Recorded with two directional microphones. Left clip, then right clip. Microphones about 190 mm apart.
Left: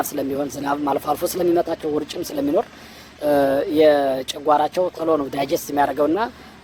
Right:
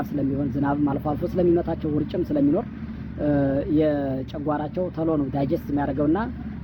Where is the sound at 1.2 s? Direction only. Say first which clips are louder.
Left 2 dB; 35° left (ahead or behind).